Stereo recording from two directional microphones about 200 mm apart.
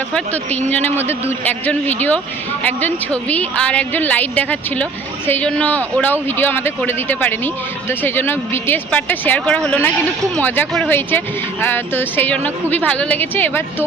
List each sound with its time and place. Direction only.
0.7 s a woman's voice: 10° left (ahead or behind)